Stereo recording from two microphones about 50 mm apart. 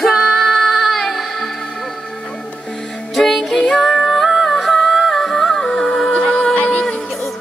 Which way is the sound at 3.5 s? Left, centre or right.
Centre.